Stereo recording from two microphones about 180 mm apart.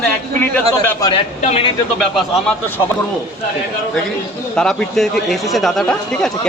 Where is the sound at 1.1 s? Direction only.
30° left (ahead or behind).